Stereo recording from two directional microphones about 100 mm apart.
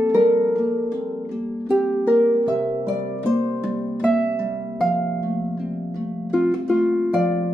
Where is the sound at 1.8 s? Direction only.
Centre (ahead or behind).